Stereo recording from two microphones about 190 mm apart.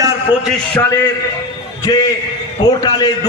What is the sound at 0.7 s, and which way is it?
A man's voice, 15° left (ahead or behind).